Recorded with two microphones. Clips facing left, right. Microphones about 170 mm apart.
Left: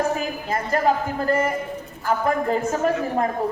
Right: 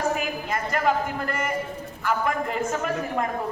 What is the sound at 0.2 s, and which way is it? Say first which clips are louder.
A woman's voice: left 2 dB; 35° left (ahead or behind).